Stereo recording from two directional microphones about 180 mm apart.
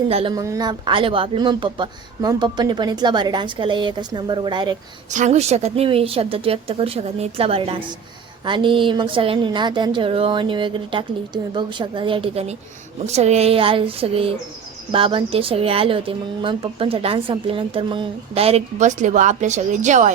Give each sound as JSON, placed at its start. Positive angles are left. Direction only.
{"t": 0.1, "sound": "speech", "side_deg": -35}
{"t": 0.3, "sound": "speech", "side_deg": -20}
{"t": 5.1, "sound": "speech", "side_deg": -40}